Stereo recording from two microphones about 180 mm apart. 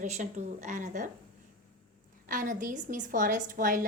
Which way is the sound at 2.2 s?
45° right (ahead or behind).